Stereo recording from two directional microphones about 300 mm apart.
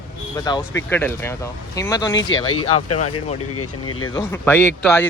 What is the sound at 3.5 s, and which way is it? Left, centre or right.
Speech, left.